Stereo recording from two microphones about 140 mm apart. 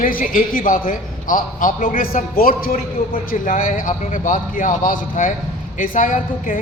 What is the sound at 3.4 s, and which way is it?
A woman's voice, 70° left (ahead or behind).